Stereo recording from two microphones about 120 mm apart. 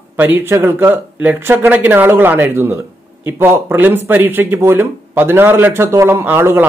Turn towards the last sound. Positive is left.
turn(degrees=-20)  # may be behind; listen again after turning